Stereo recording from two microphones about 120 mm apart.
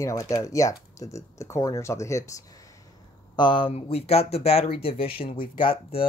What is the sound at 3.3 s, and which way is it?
Speech, 45° left (ahead or behind).